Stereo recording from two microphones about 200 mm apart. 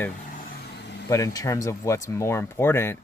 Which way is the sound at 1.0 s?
15° left (ahead or behind).